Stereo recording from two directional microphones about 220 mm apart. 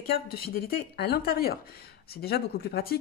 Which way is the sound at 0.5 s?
45° left (ahead or behind).